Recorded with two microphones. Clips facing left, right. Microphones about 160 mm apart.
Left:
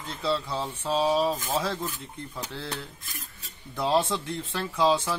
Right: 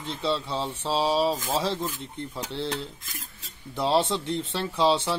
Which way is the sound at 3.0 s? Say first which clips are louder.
Right 1 dB; 90° right.